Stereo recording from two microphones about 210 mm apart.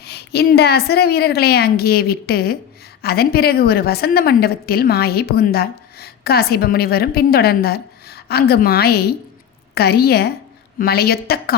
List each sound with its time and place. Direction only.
0.0 s a woman's voice: 50° left (ahead or behind)